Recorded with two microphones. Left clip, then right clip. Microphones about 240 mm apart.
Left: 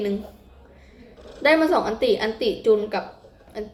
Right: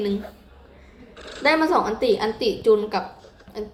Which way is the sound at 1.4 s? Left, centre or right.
Centre.